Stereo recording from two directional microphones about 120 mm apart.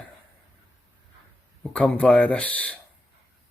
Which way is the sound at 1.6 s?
10° left (ahead or behind).